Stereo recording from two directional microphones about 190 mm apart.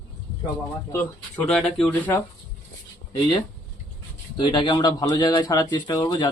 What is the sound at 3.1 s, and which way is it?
Speech, 20° left (ahead or behind).